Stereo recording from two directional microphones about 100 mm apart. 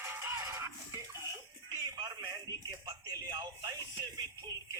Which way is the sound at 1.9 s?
35° right (ahead or behind).